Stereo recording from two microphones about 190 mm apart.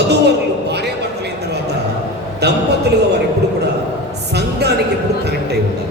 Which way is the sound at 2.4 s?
60° right (ahead or behind).